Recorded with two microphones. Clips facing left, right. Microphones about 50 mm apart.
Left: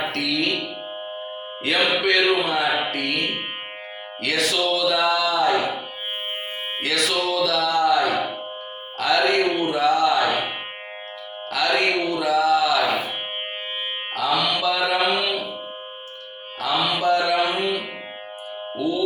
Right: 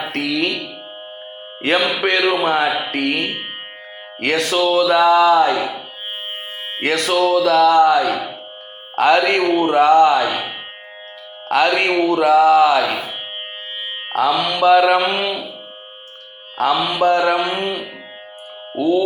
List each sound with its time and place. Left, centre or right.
0.1 s music: right
1.6 s speech: right
2.4 s speech: right
4.2 s speech: right
6.8 s speech: right
11.4 s speech: right
14.1 s speech: right
16.6 s speech: right